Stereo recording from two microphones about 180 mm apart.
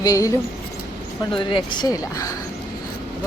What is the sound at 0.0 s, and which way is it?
Speech, 20° left (ahead or behind).